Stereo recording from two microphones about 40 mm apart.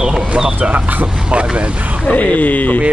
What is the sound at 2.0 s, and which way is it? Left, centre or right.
Speech, left.